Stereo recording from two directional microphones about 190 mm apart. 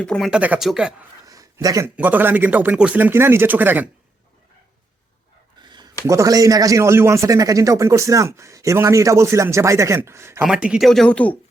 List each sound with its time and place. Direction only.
0.0 s speech: 5° left (ahead or behind)
1.2 s speech: 20° right (ahead or behind)
5.6 s a sound: 25° right (ahead or behind)
6.1 s speech: 15° right (ahead or behind); by 11.3 s 5° left (ahead or behind)